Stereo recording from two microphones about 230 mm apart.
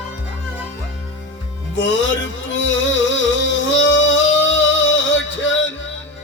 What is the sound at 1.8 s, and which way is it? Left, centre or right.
Music, left.